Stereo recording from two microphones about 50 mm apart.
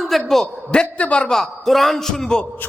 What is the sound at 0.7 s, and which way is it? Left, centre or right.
Speech, left.